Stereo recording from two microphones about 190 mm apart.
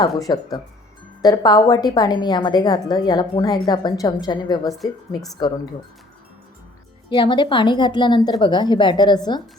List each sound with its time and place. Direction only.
0.3 s a woman's voice: 20° left (ahead or behind)
7.1 s a woman's voice: 25° left (ahead or behind)